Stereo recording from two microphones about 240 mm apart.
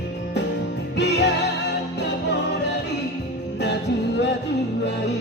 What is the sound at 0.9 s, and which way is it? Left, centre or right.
Music, left.